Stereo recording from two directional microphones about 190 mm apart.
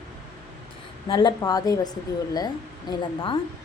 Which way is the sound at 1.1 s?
25° left (ahead or behind).